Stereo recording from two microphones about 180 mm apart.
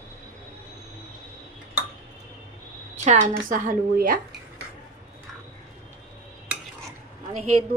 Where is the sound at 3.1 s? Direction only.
50° right (ahead or behind).